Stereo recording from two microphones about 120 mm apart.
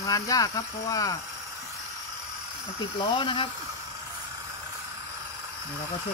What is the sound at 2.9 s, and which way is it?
Speech, 45° left (ahead or behind).